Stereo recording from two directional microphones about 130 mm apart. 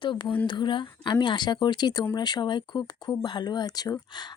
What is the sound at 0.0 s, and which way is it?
Speech, 40° left (ahead or behind).